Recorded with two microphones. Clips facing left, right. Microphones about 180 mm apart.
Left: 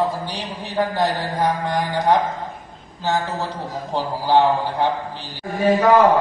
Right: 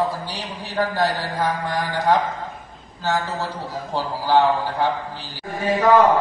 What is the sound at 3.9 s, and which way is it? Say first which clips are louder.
Speech: left 1 dB; 15° left (ahead or behind).